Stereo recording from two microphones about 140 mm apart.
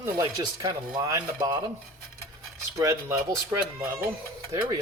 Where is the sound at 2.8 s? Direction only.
20° right (ahead or behind).